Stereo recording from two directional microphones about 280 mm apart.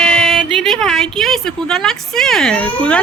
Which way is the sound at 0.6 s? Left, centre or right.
Centre.